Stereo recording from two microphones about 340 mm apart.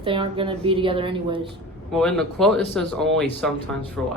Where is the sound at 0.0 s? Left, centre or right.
Centre.